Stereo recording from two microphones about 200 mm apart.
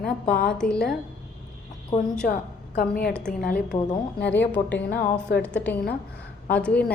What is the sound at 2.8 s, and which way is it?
Speech, 5° left (ahead or behind).